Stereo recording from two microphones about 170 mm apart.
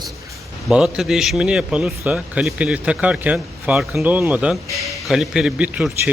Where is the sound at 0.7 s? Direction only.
5° right (ahead or behind).